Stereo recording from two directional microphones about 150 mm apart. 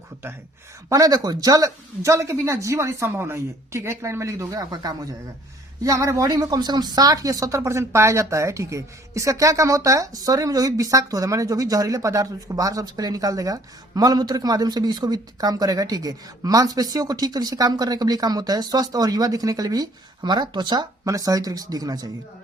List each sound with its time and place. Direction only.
0.9 s speech: 25° right (ahead or behind)